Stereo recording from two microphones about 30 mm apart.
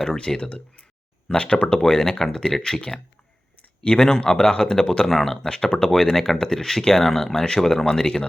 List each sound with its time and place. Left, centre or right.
0.3 s speech: centre
1.4 s speech: left
1.8 s speech: left
3.8 s speech: left
5.0 s speech: centre
7.4 s speech: left
7.9 s speech: left